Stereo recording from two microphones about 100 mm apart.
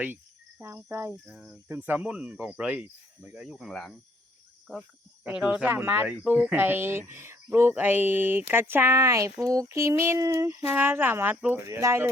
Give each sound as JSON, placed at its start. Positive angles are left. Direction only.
{"t": 0.6, "sound": "speech", "side_deg": -25}
{"t": 1.3, "sound": "cricket", "side_deg": -15}
{"t": 5.6, "sound": "speech", "side_deg": -20}
{"t": 10.7, "sound": "speech", "side_deg": -20}
{"t": 11.3, "sound": "cricket", "side_deg": -15}
{"t": 11.6, "sound": "speech", "side_deg": -30}